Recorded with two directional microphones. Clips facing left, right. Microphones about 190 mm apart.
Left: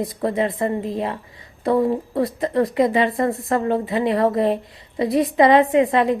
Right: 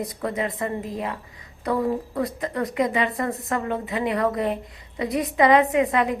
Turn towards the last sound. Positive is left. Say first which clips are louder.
# left 4 dB
turn(degrees=30)  # may be behind; listen again after turning